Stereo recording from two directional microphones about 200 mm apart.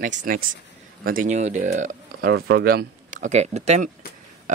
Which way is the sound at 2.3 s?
55° right (ahead or behind).